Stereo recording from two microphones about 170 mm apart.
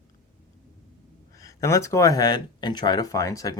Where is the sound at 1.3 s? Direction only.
20° left (ahead or behind).